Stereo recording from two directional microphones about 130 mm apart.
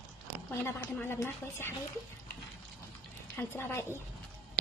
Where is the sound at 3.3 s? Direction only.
15° left (ahead or behind).